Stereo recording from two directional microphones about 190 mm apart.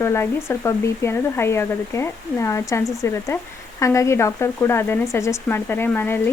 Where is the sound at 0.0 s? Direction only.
15° left (ahead or behind).